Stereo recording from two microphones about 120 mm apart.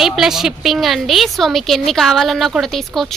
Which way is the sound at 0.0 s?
5° right (ahead or behind).